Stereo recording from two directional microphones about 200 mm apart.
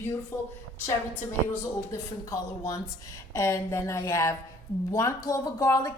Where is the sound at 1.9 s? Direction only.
15° left (ahead or behind).